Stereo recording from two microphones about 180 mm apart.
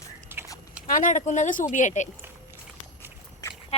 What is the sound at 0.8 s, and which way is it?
Speech, 45° left (ahead or behind).